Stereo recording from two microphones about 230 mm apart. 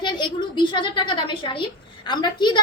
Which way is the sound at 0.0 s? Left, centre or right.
Centre.